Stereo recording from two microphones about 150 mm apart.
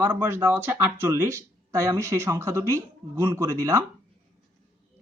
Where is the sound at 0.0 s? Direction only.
15° right (ahead or behind).